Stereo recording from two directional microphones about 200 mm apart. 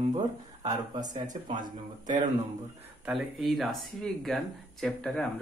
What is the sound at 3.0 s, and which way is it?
Speech, centre (ahead or behind).